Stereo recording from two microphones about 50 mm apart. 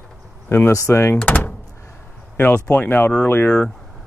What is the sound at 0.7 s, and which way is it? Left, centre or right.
Speech, left.